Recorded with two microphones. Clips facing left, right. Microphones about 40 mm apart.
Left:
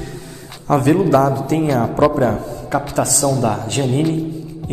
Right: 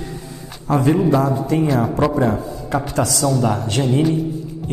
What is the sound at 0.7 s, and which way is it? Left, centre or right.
A man's voice, left.